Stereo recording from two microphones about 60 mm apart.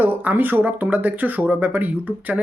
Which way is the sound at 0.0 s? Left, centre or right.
Right.